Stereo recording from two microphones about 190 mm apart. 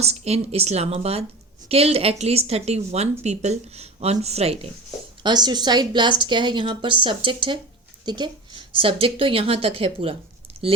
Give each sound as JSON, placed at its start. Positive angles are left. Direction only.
{"t": 0.0, "sound": "a woman's voice", "side_deg": -35}